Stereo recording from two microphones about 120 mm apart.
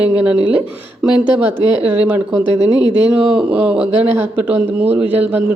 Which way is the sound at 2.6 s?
35° left (ahead or behind).